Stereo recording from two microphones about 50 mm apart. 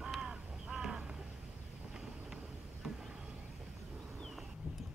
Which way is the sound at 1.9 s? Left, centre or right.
Centre.